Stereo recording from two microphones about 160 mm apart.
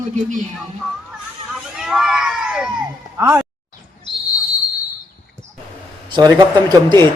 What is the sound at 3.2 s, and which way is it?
Speech, 15° right (ahead or behind).